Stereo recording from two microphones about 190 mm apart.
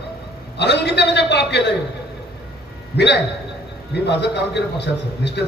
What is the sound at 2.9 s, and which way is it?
A man's voice, 65° left (ahead or behind).